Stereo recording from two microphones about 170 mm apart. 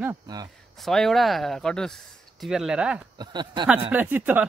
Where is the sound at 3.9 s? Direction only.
10° right (ahead or behind).